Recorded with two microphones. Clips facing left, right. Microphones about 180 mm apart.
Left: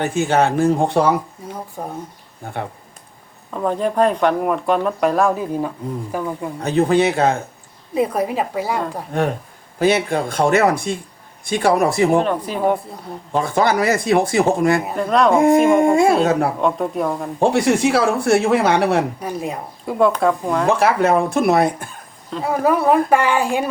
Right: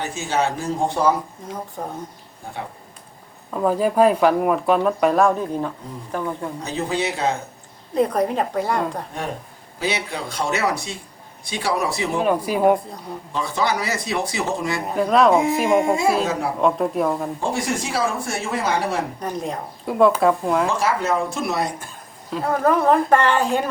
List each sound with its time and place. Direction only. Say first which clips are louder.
0.0 s speech: left 6 dB; 55° left (ahead or behind)
1.4 s a sound: left 1 dB; 10° left (ahead or behind)
1.8 s a woman's voice: left 2 dB; 10° left (ahead or behind)
3.5 s speech: right 1 dB; 5° right (ahead or behind)
6.6 s speech: left 11 dB; 55° left (ahead or behind)
7.9 s a woman's voice: even; 5° left (ahead or behind)
9.7 s speech: left 9 dB; 50° left (ahead or behind)
12.2 s speech: right 2 dB; 10° right (ahead or behind)
13.3 s speech: left 6 dB; 50° left (ahead or behind)
14.8 s speech: even; centre (ahead or behind)
17.4 s speech: left 13 dB; 65° left (ahead or behind)
19.2 s speech: left 1 dB; 10° left (ahead or behind)
20.7 s speech: left 6 dB; 60° left (ahead or behind)
22.4 s a woman's voice: left 1 dB; 10° left (ahead or behind)